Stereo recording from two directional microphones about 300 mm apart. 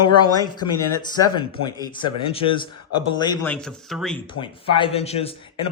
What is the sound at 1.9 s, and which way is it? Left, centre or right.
A man's voice, centre.